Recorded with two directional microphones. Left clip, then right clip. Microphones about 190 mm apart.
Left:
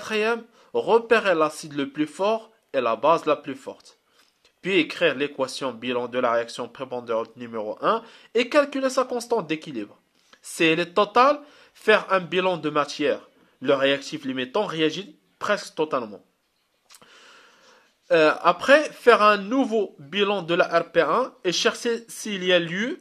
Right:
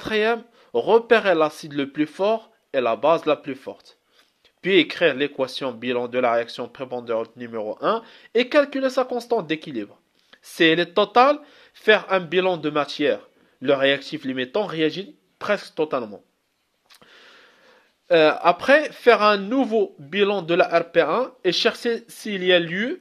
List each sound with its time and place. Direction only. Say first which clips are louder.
0.0 s speech: right 3 dB; 20° right (ahead or behind)
16.9 s a sound: right 1 dB; 15° right (ahead or behind)
18.0 s speech: right 2 dB; 20° right (ahead or behind)